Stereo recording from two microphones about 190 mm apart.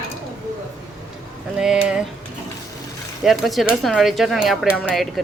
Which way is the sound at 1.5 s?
5° right (ahead or behind).